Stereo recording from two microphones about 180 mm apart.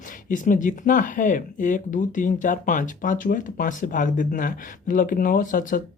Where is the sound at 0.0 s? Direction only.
45° left (ahead or behind).